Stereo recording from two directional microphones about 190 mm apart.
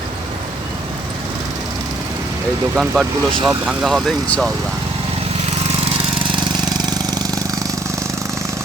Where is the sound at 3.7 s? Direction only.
Centre (ahead or behind).